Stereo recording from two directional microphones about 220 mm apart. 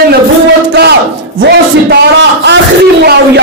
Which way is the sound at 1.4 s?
50° right (ahead or behind).